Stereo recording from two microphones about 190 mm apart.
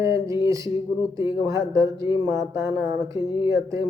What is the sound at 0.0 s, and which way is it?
Speech, 15° right (ahead or behind).